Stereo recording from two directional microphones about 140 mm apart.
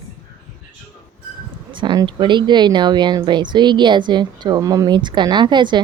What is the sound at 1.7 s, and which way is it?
Speech, 35° right (ahead or behind).